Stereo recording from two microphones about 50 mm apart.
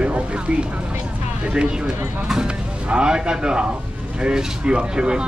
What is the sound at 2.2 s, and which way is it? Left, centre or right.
A man's voice, centre.